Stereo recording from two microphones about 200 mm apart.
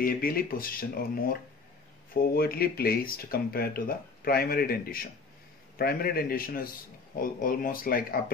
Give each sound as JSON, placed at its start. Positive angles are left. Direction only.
{"t": 0.0, "sound": "speech", "side_deg": 45}